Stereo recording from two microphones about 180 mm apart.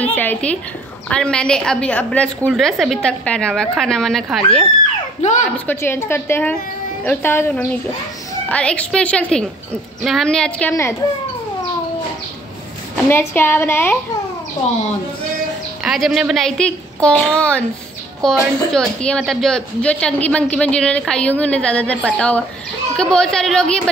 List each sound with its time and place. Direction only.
0.0 s a woman's voice: 10° left (ahead or behind)
5.2 s a woman's voice: 40° left (ahead or behind)
5.7 s a woman's voice: 15° left (ahead or behind)
10.7 s a woman's voice: 15° left (ahead or behind)
13.1 s a woman's voice: 15° left (ahead or behind)
14.7 s speech: 40° left (ahead or behind)
15.8 s a woman's voice: centre (ahead or behind)